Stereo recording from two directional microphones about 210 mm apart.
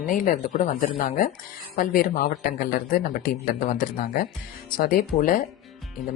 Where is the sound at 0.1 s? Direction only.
35° left (ahead or behind).